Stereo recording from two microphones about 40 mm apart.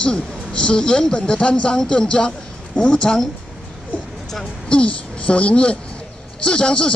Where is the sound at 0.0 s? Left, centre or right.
Left.